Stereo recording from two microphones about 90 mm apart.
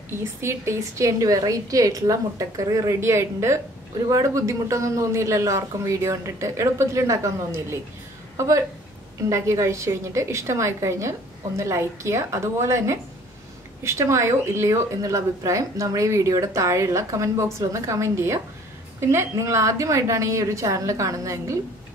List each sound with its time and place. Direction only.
0.1 s speech: 30° right (ahead or behind)